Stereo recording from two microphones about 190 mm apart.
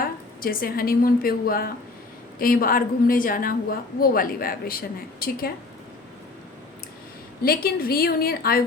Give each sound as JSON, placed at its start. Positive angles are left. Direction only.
{"t": 0.0, "sound": "a woman's voice", "side_deg": 50}
{"t": 7.4, "sound": "a woman's voice", "side_deg": 50}